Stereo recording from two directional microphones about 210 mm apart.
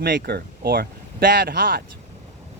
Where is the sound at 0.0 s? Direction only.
50° right (ahead or behind).